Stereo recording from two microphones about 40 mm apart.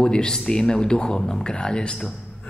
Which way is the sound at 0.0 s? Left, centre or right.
Centre.